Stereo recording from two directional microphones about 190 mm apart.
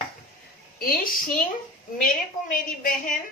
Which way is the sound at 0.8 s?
50° left (ahead or behind).